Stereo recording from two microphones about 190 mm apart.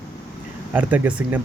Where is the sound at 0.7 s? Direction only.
10° right (ahead or behind).